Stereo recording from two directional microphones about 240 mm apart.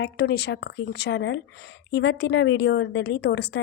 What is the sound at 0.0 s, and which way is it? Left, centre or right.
A woman's voice, left.